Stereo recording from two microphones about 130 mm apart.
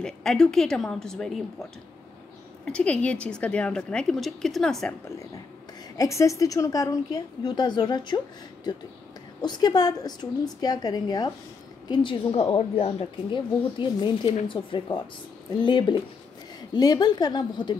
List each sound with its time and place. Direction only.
0.0 s a woman's voice: 5° left (ahead or behind)
5.9 s a woman's voice: 25° left (ahead or behind)